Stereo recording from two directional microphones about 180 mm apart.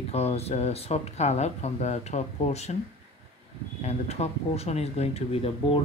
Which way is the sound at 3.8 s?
35° left (ahead or behind).